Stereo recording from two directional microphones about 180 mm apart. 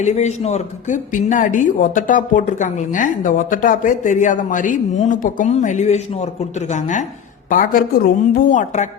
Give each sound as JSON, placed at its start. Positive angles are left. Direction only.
{"t": 0.0, "sound": "a woman's voice", "side_deg": 40}